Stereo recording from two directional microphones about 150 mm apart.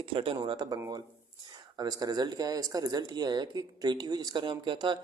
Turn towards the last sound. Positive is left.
turn(degrees=-30)  # may be behind; listen again after turning